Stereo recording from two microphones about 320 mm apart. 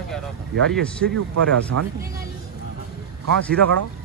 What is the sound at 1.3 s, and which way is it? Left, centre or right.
Speech, right.